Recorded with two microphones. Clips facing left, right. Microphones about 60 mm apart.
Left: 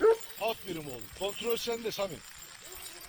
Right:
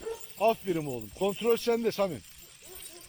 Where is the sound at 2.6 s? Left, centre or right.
Left.